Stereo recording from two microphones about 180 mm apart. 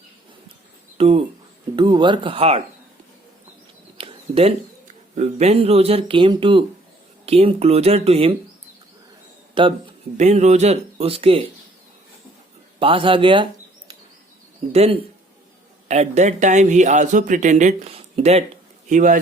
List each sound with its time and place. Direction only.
0.9 s speech: 35° right (ahead or behind)
3.9 s a sound: 30° right (ahead or behind)
5.1 s speech: 35° right (ahead or behind)
9.6 s speech: 25° right (ahead or behind)
10.2 s speech: 40° right (ahead or behind)
12.8 s speech: 30° right (ahead or behind); by 19.2 s 45° right (ahead or behind)